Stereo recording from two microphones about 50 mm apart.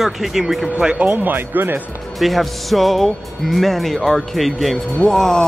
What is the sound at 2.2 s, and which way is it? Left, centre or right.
Speech, centre.